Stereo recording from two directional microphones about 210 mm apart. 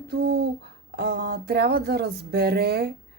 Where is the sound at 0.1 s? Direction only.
50° right (ahead or behind).